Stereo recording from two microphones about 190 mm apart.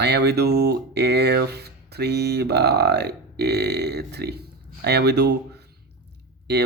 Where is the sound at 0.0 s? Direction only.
60° right (ahead or behind).